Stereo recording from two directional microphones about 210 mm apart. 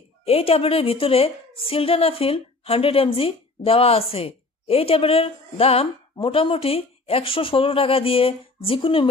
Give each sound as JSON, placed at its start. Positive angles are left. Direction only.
{"t": 0.2, "sound": "a woman's voice", "side_deg": 30}